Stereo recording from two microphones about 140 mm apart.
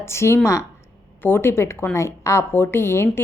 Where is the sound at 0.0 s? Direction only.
20° left (ahead or behind).